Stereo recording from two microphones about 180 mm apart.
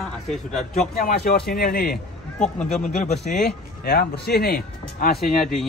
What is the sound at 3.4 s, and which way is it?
Speech, 60° left (ahead or behind).